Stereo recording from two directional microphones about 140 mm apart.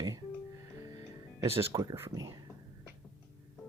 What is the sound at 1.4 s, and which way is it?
Speech, 20° right (ahead or behind).